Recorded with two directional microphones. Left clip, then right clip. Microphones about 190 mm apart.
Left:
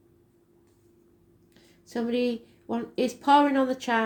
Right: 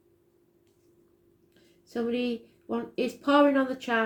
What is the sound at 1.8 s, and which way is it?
A woman's voice, 40° left (ahead or behind).